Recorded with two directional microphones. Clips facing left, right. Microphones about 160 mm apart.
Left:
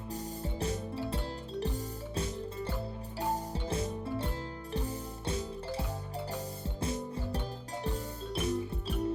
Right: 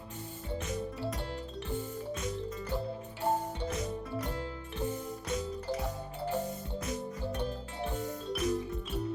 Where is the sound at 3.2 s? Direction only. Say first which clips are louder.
Right 2 dB; 30° left (ahead or behind).